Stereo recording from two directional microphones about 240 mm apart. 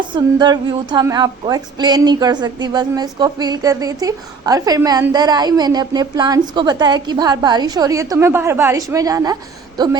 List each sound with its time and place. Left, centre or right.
0.1 s a woman's voice: centre